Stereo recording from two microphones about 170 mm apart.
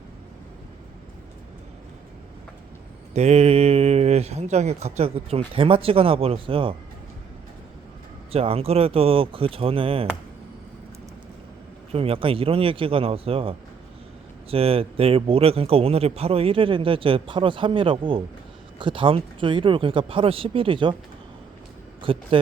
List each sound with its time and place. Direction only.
3.1 s speech: 40° right (ahead or behind)
8.3 s speech: 35° right (ahead or behind)
11.9 s speech: 35° right (ahead or behind)
22.0 s a man's voice: 35° right (ahead or behind)